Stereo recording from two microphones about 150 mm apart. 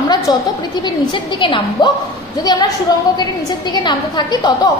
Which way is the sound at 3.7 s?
30° left (ahead or behind).